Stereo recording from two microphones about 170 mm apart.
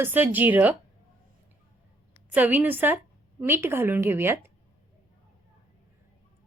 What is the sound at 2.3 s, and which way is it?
A woman's voice, 10° right (ahead or behind).